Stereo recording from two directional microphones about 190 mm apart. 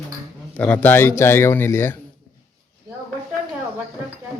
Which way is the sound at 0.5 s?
10° left (ahead or behind).